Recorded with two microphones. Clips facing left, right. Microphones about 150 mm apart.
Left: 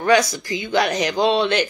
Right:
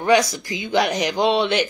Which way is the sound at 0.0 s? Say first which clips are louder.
Even; 15° right (ahead or behind).